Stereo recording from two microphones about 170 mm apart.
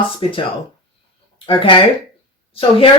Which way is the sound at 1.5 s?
30° left (ahead or behind).